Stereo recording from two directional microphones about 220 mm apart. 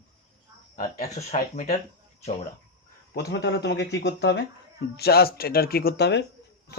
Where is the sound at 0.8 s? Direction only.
35° left (ahead or behind).